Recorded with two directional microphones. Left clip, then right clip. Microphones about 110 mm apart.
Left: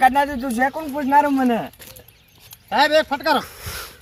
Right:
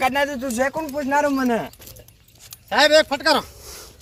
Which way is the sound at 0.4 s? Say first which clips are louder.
Left 1 dB; 90° right.